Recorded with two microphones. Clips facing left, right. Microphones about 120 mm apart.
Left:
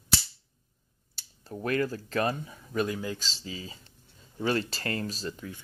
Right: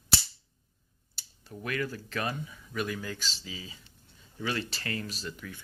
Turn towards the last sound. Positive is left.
turn(degrees=30)  # may be behind; listen again after turning